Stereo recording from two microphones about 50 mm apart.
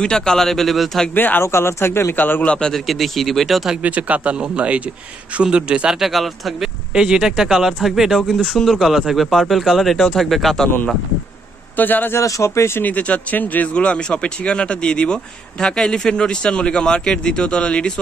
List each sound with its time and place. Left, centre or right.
0.0 s a man's voice: centre
1.1 s speech: left
1.4 s speech: left
2.1 s speech: left
2.4 s speech: left
2.7 s speech: centre
3.8 s speech: right
5.9 s speech: centre
6.9 s speech: centre
11.7 s a man's voice: left
12.2 s speech: left
12.8 s speech: left
13.7 s a man's voice: centre